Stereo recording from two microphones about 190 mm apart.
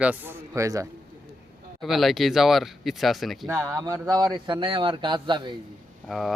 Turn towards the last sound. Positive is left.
turn(degrees=0)  # may be behind; listen again after turning